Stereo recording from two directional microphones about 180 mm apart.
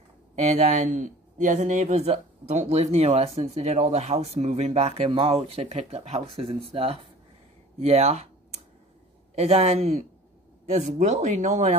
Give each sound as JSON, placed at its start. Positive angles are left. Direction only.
{"t": 0.6, "sound": "speech", "side_deg": -45}
{"t": 9.3, "sound": "speech", "side_deg": -35}